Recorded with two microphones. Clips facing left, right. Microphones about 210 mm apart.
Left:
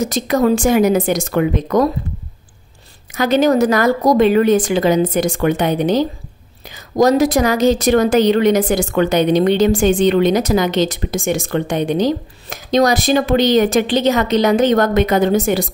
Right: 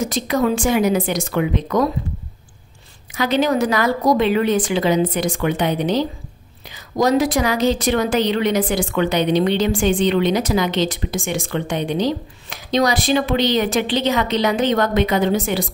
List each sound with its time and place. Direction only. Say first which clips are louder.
0.0 s a woman's voice: left 4 dB; 45° left (ahead or behind)
3.2 s a woman's voice: left 5 dB; 45° left (ahead or behind)